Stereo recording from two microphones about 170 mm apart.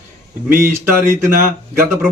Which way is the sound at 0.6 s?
15° right (ahead or behind).